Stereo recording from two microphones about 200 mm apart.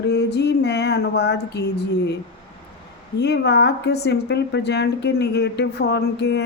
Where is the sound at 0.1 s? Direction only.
55° left (ahead or behind).